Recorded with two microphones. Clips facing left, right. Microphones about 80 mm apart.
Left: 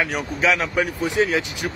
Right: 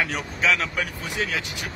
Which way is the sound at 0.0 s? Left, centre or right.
Centre.